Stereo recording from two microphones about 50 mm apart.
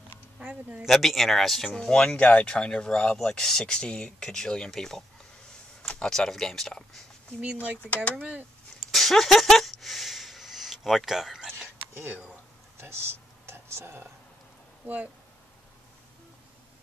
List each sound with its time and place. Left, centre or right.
0.8 s speech: centre
1.8 s speech: centre
6.0 s speech: centre
7.8 s speech: left
8.7 s a sound: centre
12.8 s a sound: right